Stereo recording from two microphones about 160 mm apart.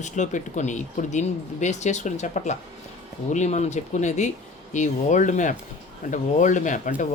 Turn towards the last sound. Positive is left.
turn(degrees=50)  # may be behind; listen again after turning